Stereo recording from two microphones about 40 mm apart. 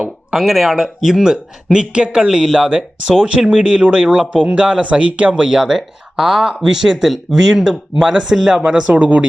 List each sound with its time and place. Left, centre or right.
0.3 s speech: centre
1.2 s speech: centre
2.2 s speech: centre
2.6 s speech: right
5.5 s speech: centre
8.6 s speech: right